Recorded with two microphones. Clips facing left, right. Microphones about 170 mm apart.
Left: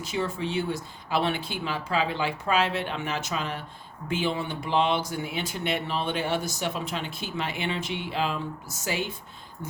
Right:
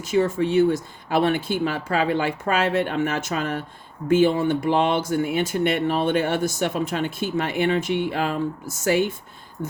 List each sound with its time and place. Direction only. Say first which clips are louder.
0.0 s speech: right 9 dB; 45° right (ahead or behind)